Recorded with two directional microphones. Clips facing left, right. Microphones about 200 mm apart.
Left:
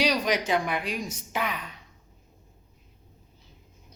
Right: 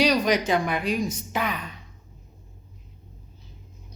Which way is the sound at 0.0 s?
45° right (ahead or behind).